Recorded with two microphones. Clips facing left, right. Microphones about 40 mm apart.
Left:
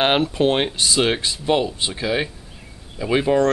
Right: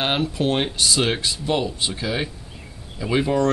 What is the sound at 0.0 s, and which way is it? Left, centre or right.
Speech, left.